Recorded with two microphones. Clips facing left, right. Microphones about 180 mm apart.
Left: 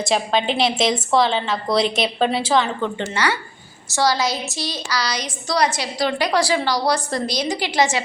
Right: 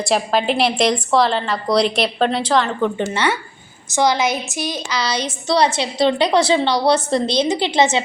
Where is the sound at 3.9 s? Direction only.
20° right (ahead or behind).